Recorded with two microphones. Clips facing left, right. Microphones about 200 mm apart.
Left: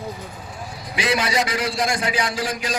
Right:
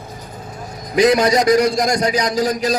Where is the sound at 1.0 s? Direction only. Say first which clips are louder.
Right 9 dB; 40° right (ahead or behind).